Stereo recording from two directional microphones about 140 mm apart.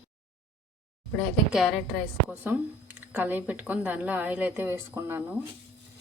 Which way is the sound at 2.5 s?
15° right (ahead or behind).